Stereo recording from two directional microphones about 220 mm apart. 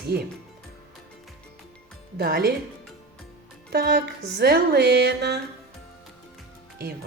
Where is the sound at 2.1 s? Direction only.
45° right (ahead or behind).